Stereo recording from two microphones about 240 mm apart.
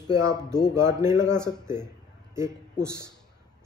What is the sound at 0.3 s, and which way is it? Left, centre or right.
Speech, centre.